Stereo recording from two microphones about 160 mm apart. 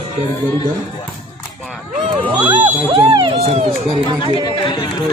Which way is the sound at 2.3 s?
30° right (ahead or behind).